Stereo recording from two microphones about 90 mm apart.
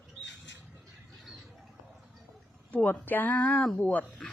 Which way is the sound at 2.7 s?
20° left (ahead or behind).